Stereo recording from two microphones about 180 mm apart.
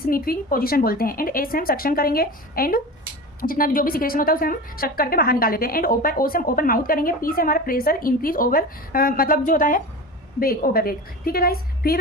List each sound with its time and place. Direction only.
0.0 s a woman's voice: 55° left (ahead or behind)